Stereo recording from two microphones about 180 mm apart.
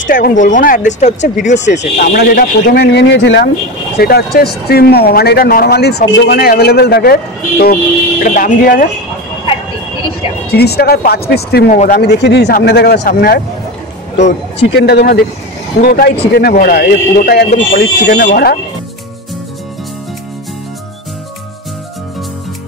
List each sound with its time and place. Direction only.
0.0 s speech: 45° left (ahead or behind)
2.0 s speech: 60° left (ahead or behind)
4.0 s speech: 60° left (ahead or behind)
10.5 s speech: 65° left (ahead or behind)
14.6 s speech: 65° left (ahead or behind)